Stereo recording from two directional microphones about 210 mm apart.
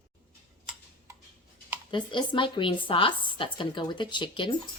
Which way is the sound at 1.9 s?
20° left (ahead or behind).